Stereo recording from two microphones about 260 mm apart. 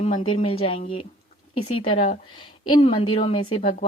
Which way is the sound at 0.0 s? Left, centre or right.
Left.